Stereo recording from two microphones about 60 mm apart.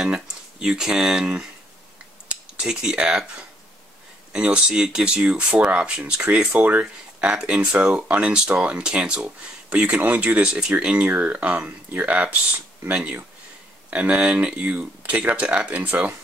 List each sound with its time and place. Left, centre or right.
0.0 s speech: centre
4.3 s speech: centre
5.2 s speech: right
10.4 s speech: centre